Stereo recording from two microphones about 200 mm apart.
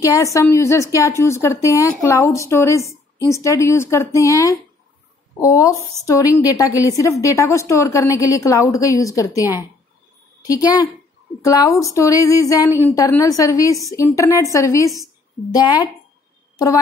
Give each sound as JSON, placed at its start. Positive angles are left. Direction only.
{"t": 0.0, "sound": "a woman's voice", "side_deg": 15}